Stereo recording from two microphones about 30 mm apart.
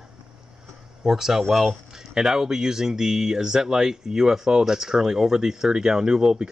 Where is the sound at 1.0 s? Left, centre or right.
Centre.